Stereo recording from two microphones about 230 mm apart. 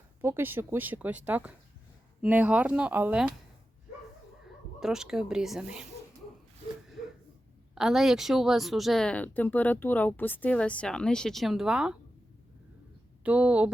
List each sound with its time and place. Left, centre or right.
0.2 s speech: centre
4.8 s speech: centre
7.8 s speech: centre
13.2 s speech: centre